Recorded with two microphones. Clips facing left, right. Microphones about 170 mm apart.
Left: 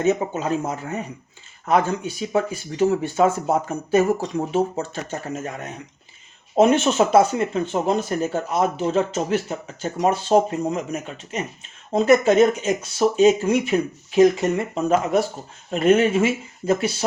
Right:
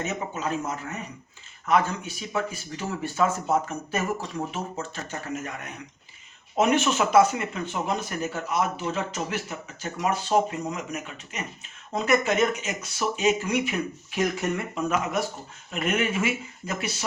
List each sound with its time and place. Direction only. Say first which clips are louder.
0.0 s speech: left 9 dB; 30° left (ahead or behind)
2.3 s speech: left 6 dB; 30° left (ahead or behind)